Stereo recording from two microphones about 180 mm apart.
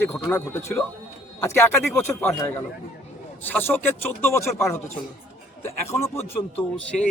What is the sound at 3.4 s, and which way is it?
Speech, 10° left (ahead or behind).